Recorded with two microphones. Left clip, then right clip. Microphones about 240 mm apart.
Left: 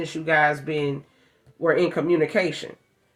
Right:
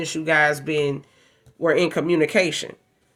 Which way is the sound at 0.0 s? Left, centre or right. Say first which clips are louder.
Right 1 dB; right.